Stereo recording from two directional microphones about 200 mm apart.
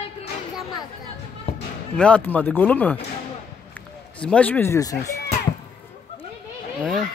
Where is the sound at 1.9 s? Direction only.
5° left (ahead or behind).